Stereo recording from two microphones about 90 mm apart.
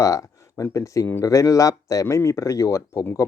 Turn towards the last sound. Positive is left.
turn(degrees=35)  # may be behind; listen again after turning